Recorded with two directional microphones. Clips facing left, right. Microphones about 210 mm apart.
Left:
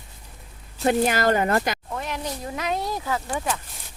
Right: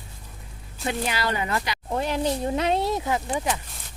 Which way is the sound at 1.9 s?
30° right (ahead or behind).